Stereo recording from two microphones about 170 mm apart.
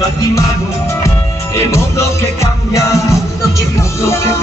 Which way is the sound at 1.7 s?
15° left (ahead or behind).